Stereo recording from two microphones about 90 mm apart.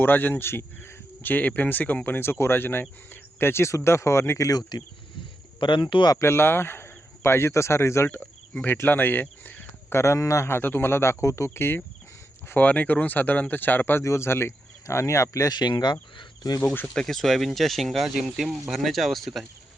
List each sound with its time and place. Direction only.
0.0 s speech: 20° left (ahead or behind); by 4.8 s 40° left (ahead or behind)
5.5 s speech: 60° left (ahead or behind)
6.1 s speech: 25° left (ahead or behind)
10.0 s speech: 35° left (ahead or behind)
15.5 s speech: 50° left (ahead or behind)
16.8 s speech: 5° left (ahead or behind)